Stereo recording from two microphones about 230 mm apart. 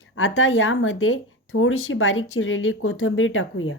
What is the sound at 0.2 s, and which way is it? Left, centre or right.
Speech, left.